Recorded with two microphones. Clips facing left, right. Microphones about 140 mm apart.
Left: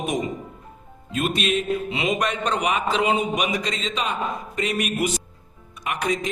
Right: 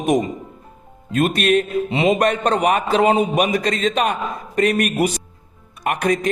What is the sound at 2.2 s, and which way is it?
A man's voice, 50° right (ahead or behind).